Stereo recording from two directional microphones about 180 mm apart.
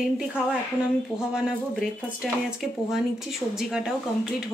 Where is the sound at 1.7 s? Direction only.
Centre (ahead or behind).